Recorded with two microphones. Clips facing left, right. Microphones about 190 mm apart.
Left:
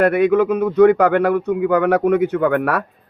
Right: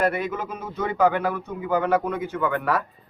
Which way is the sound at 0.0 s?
65° left (ahead or behind).